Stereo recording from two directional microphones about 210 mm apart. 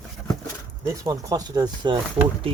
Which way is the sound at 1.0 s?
15° right (ahead or behind).